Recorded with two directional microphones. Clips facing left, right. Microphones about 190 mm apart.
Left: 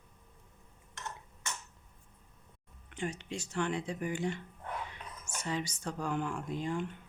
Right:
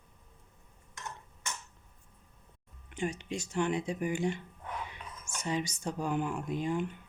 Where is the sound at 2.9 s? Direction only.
15° right (ahead or behind).